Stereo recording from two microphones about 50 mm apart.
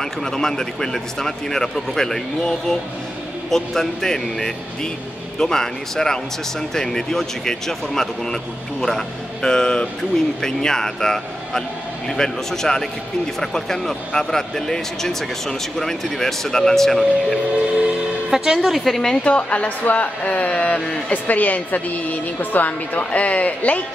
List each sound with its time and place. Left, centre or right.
0.0 s a man's voice: centre
18.3 s a woman's voice: centre
18.6 s a woman's voice: centre
19.2 s a woman's voice: left